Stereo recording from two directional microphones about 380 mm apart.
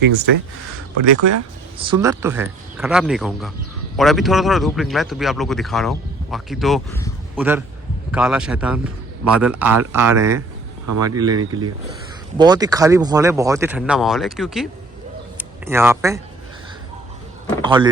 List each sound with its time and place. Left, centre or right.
1.1 s speech: right
1.8 s speech: centre
10.8 s speech: right
12.4 s speech: centre
17.6 s speech: centre